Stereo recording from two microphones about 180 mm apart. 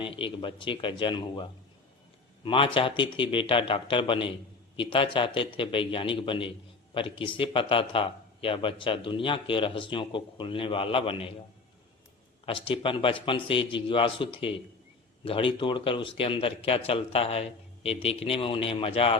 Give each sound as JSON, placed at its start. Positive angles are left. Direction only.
{"t": 0.0, "sound": "speech", "side_deg": 30}
{"t": 12.5, "sound": "a man's voice", "side_deg": 30}